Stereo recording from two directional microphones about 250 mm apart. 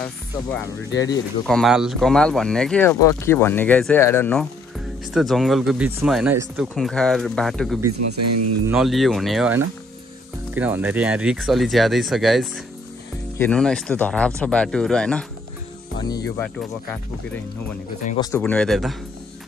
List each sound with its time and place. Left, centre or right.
0.9 s speech: centre
1.5 s speech: centre
8.1 s speech: right
8.6 s speech: centre
16.0 s speech: centre
18.2 s speech: centre